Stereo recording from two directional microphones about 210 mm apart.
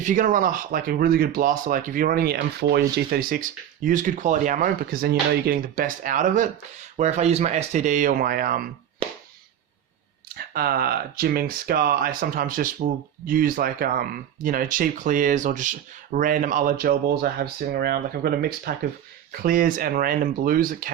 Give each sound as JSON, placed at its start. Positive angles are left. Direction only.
{"t": 0.0, "sound": "speech", "side_deg": -40}
{"t": 9.0, "sound": "a sound", "side_deg": -25}
{"t": 10.2, "sound": "speech", "side_deg": -45}